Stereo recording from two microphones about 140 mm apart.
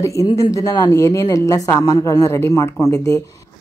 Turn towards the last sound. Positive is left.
turn(degrees=20)  # may be behind; listen again after turning